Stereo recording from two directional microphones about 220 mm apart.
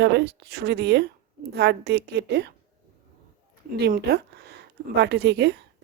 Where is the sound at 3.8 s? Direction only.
45° right (ahead or behind).